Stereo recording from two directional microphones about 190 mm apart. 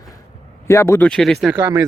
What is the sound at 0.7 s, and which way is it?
Speech, 15° left (ahead or behind).